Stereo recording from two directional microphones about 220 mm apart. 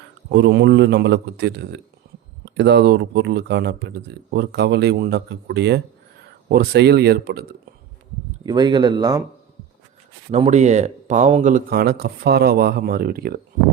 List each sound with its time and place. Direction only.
0.3 s speech: 50° right (ahead or behind)
8.4 s speech: 20° right (ahead or behind)
10.3 s speech: 30° right (ahead or behind)